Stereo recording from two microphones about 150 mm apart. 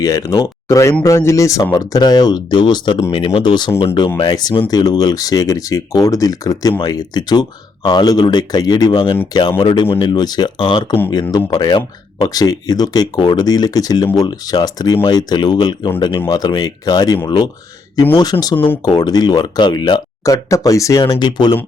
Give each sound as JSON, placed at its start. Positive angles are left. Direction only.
{"t": 0.0, "sound": "speech", "side_deg": 25}
{"t": 18.5, "sound": "speech", "side_deg": 15}
{"t": 18.9, "sound": "speech", "side_deg": 25}